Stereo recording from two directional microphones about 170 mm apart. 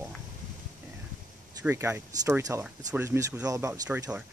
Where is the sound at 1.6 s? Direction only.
15° right (ahead or behind).